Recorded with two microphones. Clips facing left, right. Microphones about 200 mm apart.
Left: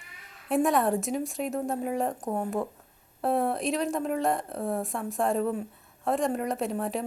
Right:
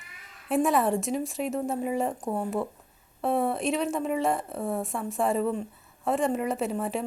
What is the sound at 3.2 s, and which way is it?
A woman's voice, centre (ahead or behind).